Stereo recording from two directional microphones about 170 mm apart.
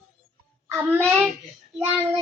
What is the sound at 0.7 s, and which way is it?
Speech, 10° right (ahead or behind).